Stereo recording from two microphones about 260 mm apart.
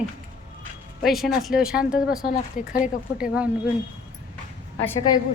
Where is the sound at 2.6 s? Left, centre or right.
Left.